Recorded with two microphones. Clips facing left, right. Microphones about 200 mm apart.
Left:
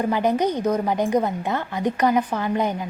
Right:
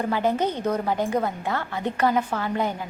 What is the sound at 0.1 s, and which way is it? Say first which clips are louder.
A woman's voice: left 3 dB; 15° left (ahead or behind).